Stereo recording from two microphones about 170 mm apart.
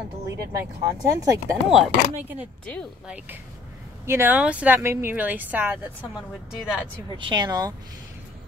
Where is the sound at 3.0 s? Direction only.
10° right (ahead or behind).